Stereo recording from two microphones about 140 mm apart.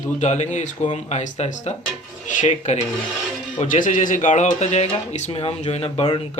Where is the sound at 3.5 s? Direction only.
70° left (ahead or behind); by 6.2 s 45° left (ahead or behind).